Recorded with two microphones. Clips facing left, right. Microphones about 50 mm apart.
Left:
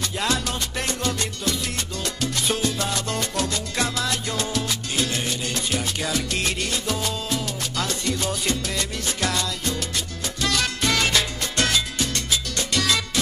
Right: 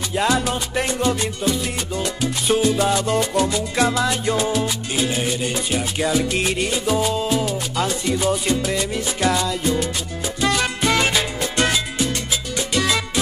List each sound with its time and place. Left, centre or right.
0.1 s music: centre
10.4 s salsa music: centre